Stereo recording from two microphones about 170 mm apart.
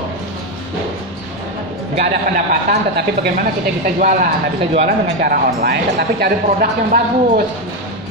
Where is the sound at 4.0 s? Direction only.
50° right (ahead or behind).